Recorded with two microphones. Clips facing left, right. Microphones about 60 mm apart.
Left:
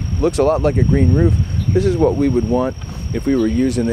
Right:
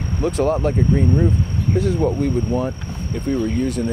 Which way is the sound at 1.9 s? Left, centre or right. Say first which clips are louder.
Left 5 dB; centre.